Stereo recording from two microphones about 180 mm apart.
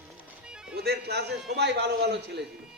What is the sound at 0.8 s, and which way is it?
A man's voice, 60° right (ahead or behind).